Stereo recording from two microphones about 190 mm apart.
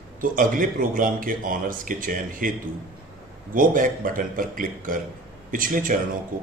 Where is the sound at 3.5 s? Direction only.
45° right (ahead or behind).